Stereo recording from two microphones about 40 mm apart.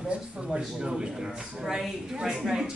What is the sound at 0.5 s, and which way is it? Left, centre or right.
Speech, right.